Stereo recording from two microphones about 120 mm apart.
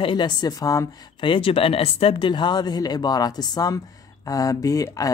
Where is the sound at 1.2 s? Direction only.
50° left (ahead or behind).